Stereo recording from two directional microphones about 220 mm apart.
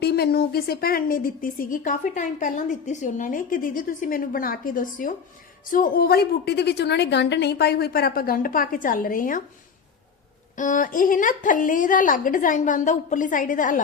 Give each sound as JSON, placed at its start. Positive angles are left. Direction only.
{"t": 0.0, "sound": "a woman's voice", "side_deg": 45}
{"t": 10.5, "sound": "a woman's voice", "side_deg": 35}